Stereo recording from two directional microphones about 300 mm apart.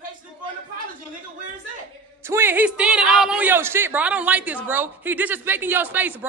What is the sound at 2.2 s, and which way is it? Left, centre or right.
A man's voice, centre.